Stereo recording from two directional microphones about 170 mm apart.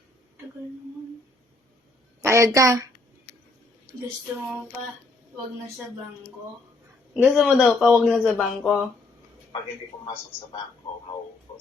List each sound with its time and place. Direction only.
2.2 s a woman's voice: 15° right (ahead or behind)
7.1 s a man's voice: 5° right (ahead or behind)